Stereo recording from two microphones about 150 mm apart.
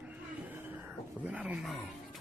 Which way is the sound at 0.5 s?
15° right (ahead or behind).